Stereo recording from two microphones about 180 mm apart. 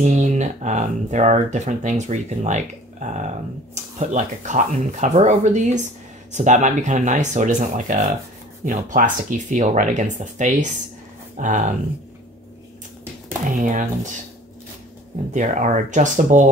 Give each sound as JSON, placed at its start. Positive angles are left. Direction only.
{"t": 0.0, "sound": "speech", "side_deg": -40}
{"t": 13.6, "sound": "speech", "side_deg": -45}
{"t": 15.3, "sound": "speech", "side_deg": -45}